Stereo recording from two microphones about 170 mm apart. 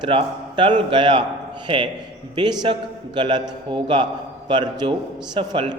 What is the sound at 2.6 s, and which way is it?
A man's voice, 25° right (ahead or behind).